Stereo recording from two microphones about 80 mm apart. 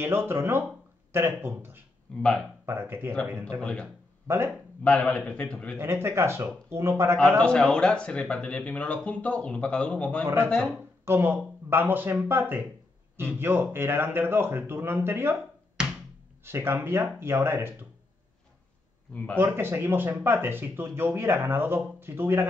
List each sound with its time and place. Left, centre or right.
0.0 s speech: right
2.1 s a man's voice: centre
2.6 s speech: right
3.6 s a man's voice: centre
4.3 s speech: right
4.8 s a man's voice: centre
5.8 s speech: right
7.2 s a man's voice: centre
11.1 s speech: right
15.8 s a sound: centre
16.4 s speech: right
19.3 s speech: right